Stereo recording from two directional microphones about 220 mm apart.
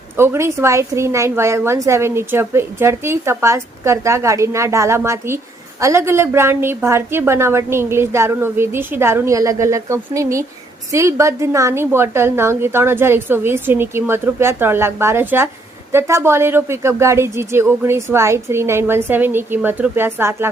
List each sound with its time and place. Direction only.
0.2 s a woman's voice: 10° right (ahead or behind)